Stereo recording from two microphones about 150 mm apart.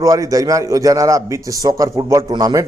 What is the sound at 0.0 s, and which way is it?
A man's voice, 25° right (ahead or behind).